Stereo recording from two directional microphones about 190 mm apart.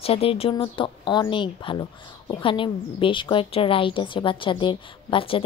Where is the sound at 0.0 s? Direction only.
30° left (ahead or behind).